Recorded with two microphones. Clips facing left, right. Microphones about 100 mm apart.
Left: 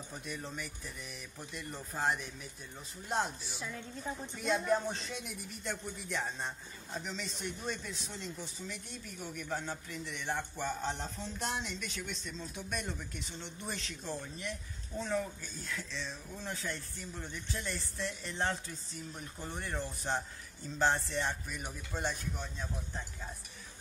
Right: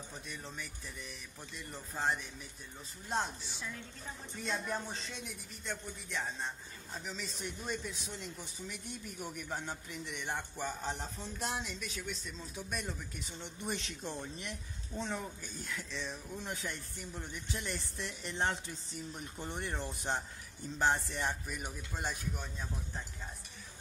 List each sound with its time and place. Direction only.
0.3 s speech: 5° left (ahead or behind)
1.7 s a man's voice: 5° left (ahead or behind)
5.2 s a man's voice: 5° left (ahead or behind)
13.7 s a man's voice: 20° right (ahead or behind)